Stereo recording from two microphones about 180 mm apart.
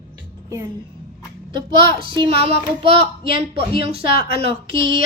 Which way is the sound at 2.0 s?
30° right (ahead or behind).